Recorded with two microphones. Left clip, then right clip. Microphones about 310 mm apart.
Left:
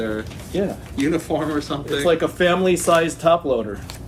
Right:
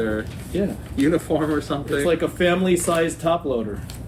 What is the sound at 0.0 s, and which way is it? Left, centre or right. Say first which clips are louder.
Speech: right 1 dB; centre.